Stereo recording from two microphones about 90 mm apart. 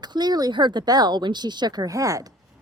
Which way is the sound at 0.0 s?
50° right (ahead or behind).